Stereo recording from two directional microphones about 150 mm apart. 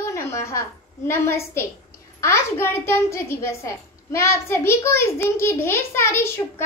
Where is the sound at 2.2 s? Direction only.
20° left (ahead or behind).